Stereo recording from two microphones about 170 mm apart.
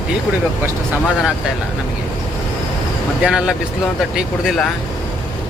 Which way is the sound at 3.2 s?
5° right (ahead or behind).